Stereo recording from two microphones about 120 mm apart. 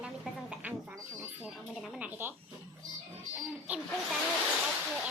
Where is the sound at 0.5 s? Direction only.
10° right (ahead or behind).